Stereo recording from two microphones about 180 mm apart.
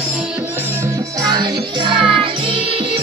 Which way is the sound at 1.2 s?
25° right (ahead or behind).